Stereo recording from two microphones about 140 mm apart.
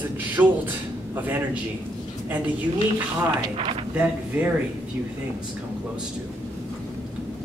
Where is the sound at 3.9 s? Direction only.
15° right (ahead or behind).